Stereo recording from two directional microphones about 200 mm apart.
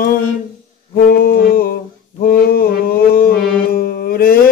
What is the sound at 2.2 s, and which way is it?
Mantra, 50° left (ahead or behind).